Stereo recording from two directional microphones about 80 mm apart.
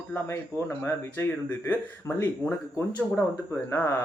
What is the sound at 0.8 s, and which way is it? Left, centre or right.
Speech, left.